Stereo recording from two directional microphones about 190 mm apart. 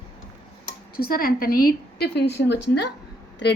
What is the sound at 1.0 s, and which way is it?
A woman's voice, 50° left (ahead or behind).